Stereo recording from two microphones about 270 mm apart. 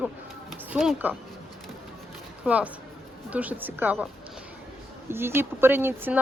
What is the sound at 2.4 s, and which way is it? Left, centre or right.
Speech, centre.